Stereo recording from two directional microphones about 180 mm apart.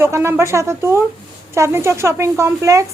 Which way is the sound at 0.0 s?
15° right (ahead or behind).